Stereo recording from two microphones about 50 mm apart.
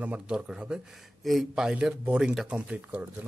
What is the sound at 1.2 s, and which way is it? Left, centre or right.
Speech, centre.